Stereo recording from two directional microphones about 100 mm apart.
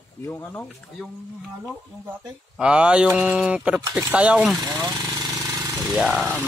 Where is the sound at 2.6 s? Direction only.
10° right (ahead or behind).